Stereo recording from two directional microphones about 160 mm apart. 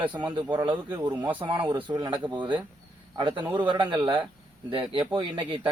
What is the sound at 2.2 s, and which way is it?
A man's voice, 30° right (ahead or behind).